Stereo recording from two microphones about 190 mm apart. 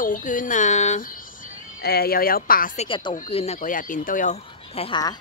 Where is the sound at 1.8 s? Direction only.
55° left (ahead or behind).